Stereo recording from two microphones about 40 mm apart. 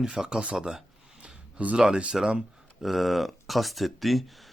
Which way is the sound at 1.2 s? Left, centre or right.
Right.